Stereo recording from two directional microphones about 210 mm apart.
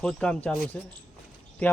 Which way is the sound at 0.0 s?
5° left (ahead or behind).